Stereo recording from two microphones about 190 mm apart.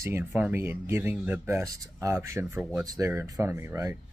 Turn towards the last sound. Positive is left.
turn(degrees=-15)  # may be behind; listen again after turning